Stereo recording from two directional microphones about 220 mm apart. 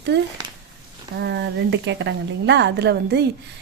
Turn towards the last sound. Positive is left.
turn(degrees=-50)  # may be behind; listen again after turning